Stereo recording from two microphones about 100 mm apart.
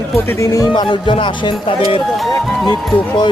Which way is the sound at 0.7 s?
55° left (ahead or behind).